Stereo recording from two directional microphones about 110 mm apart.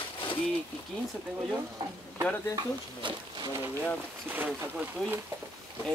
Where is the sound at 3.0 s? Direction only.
45° right (ahead or behind).